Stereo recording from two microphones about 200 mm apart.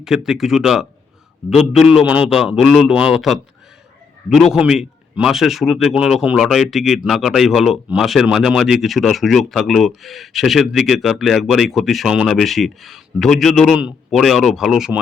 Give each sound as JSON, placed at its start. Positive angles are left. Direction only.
{"t": 0.0, "sound": "a man's voice", "side_deg": 0}